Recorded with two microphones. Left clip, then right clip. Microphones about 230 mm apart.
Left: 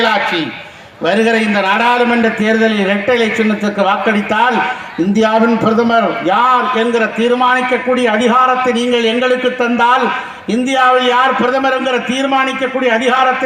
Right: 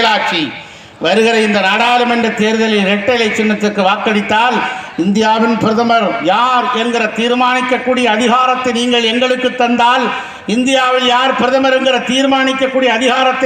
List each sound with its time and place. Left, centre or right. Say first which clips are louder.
0.0 s a man's voice: right 1 dB; right